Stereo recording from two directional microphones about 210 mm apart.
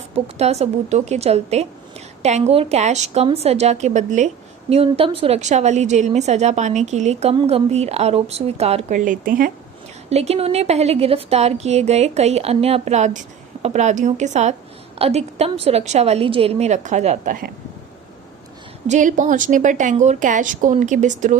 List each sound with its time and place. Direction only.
0.1 s a woman's voice: 30° right (ahead or behind)
10.1 s a woman's voice: 30° right (ahead or behind)
18.9 s a woman's voice: 35° right (ahead or behind)